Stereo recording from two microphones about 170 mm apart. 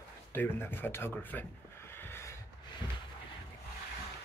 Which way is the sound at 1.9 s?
15° left (ahead or behind).